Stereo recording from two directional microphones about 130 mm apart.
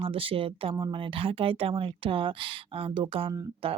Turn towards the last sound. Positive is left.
turn(degrees=-45)  # may be behind; listen again after turning